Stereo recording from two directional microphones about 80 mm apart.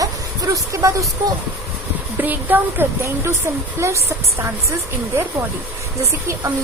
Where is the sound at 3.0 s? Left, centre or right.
Right.